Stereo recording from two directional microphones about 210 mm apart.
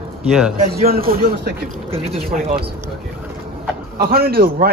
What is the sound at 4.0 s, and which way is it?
Speech, 45° right (ahead or behind).